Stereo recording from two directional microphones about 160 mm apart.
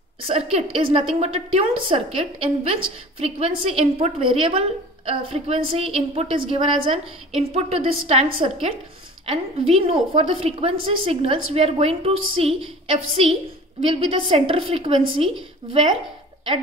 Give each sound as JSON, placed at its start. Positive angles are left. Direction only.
{"t": 0.2, "sound": "a woman's voice", "side_deg": -40}